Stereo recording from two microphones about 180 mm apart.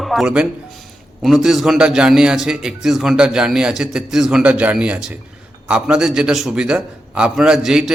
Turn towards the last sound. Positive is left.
turn(degrees=-5)  # may be behind; listen again after turning